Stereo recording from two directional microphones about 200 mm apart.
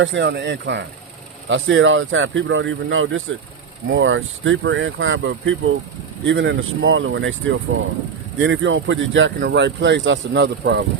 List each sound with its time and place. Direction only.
0.0 s speech: 65° right (ahead or behind); by 3.3 s 85° right
3.9 s speech: 75° right (ahead or behind)